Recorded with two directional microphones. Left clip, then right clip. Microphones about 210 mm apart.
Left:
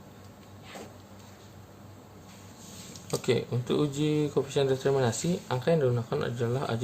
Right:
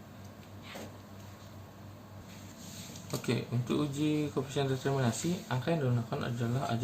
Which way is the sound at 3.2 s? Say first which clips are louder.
Left 7 dB; 55° left (ahead or behind).